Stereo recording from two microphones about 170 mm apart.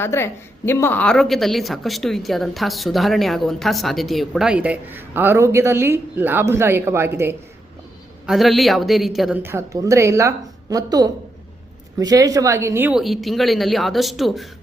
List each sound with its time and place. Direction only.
0.0 s a woman's voice: 15° left (ahead or behind); by 7.3 s 15° right (ahead or behind)
8.3 s a woman's voice: centre (ahead or behind)
9.4 s a woman's voice: 15° right (ahead or behind)
13.0 s a woman's voice: centre (ahead or behind)